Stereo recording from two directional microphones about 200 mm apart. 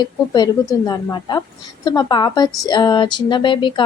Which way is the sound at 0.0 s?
20° left (ahead or behind).